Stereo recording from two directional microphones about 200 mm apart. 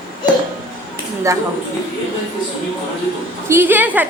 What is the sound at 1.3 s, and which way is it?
Speech, 15° right (ahead or behind).